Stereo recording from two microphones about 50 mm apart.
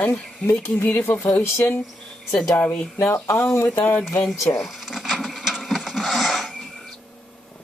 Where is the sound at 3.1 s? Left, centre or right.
Left.